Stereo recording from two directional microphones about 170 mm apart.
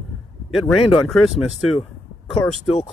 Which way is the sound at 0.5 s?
Centre (ahead or behind).